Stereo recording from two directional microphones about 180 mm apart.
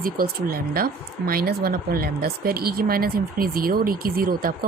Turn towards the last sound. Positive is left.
turn(degrees=-55)  # may be behind; listen again after turning